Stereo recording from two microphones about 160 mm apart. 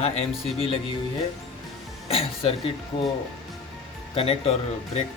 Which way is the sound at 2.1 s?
35° left (ahead or behind).